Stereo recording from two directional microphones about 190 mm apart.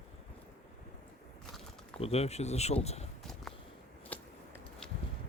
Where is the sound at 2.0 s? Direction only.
35° left (ahead or behind).